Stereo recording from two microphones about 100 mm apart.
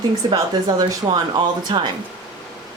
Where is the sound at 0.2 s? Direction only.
45° right (ahead or behind).